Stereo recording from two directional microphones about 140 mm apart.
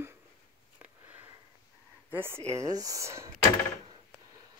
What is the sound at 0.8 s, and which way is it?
Sniff, 10° right (ahead or behind).